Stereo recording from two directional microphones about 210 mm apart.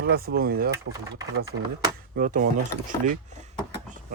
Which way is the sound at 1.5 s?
15° right (ahead or behind).